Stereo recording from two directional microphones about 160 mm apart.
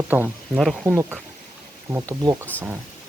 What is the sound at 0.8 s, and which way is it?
Speech, 15° right (ahead or behind).